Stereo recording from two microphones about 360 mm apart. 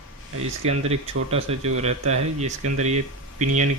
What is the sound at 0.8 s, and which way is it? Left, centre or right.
Speech, centre.